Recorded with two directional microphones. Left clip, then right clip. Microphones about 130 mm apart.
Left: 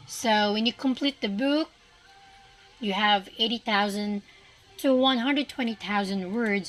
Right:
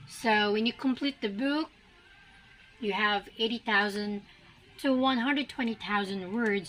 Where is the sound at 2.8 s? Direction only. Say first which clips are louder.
Left 5 dB; 55° left (ahead or behind).